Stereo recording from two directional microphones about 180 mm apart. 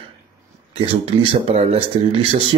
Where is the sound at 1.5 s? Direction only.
35° right (ahead or behind).